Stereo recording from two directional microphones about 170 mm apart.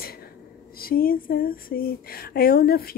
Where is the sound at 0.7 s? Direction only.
60° left (ahead or behind).